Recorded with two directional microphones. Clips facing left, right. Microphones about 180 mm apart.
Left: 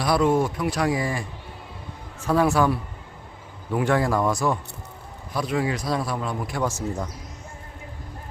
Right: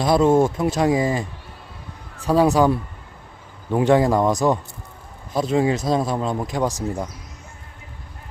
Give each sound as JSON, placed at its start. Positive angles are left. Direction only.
{"t": 0.0, "sound": "speech", "side_deg": -25}